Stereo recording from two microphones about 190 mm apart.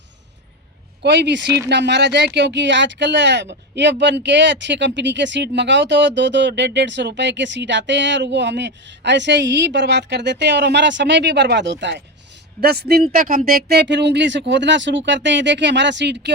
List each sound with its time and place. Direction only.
1.0 s speech: 65° right (ahead or behind)